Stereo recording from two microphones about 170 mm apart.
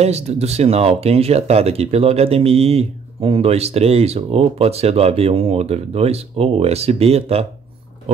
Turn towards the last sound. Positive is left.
turn(degrees=-35)  # may be behind; listen again after turning